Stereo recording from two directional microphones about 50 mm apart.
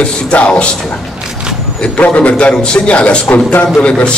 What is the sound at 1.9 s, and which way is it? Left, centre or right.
A man's voice, left.